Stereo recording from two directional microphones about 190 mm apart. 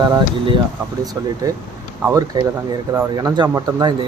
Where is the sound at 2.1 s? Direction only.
15° right (ahead or behind).